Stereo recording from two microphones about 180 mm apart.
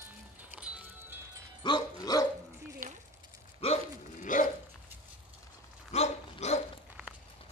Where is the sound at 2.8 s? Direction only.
50° right (ahead or behind).